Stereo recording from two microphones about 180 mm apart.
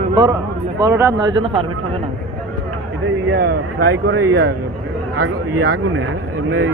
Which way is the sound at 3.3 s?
60° right (ahead or behind).